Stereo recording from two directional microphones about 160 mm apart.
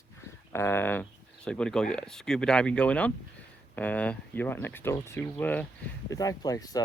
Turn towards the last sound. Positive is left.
turn(degrees=25)  # may be behind; listen again after turning